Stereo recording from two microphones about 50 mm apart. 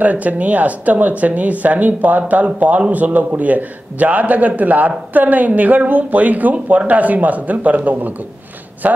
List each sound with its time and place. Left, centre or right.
0.0 s a man's voice: right